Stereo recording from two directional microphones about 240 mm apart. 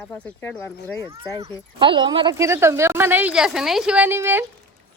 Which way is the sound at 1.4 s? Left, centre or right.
Centre.